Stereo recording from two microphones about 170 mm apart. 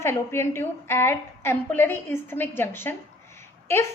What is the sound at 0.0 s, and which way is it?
A woman's voice, 15° left (ahead or behind).